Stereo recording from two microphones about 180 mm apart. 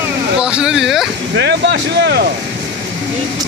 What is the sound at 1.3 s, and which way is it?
Speech, 70° right (ahead or behind).